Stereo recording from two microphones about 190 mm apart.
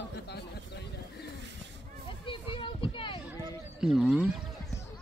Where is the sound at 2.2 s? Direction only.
25° left (ahead or behind).